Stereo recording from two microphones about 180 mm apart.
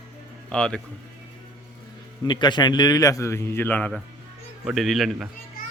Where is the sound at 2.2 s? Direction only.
25° left (ahead or behind); by 5.3 s centre (ahead or behind).